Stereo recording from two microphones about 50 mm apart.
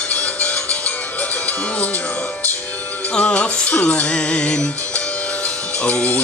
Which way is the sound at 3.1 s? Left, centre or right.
Left.